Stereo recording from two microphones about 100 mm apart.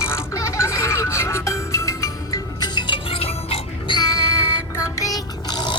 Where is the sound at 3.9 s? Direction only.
40° left (ahead or behind).